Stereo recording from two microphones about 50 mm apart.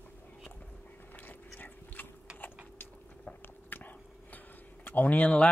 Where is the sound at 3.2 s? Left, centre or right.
Left.